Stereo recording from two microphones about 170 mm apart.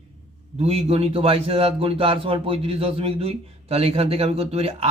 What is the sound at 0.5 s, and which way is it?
A man's voice, 35° right (ahead or behind).